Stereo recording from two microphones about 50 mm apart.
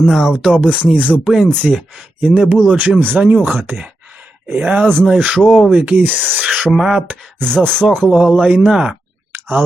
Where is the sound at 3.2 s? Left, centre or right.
Right.